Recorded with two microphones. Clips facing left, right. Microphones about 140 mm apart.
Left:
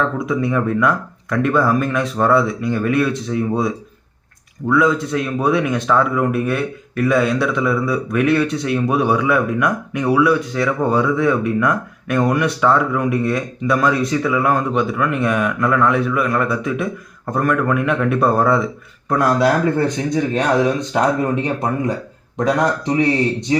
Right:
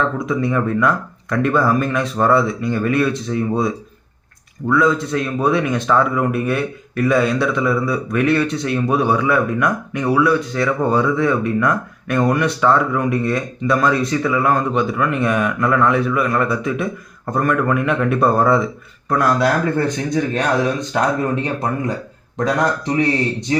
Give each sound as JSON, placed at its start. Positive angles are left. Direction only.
{"t": 0.3, "sound": "a man's voice", "side_deg": 5}
{"t": 4.7, "sound": "a man's voice", "side_deg": 5}
{"t": 19.0, "sound": "speech", "side_deg": 20}